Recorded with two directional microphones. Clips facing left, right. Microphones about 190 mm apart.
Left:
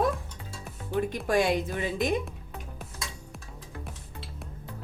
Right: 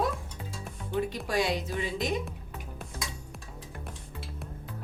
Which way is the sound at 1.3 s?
50° left (ahead or behind).